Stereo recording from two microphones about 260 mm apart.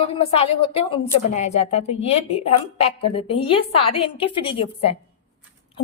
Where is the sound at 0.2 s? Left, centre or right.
Left.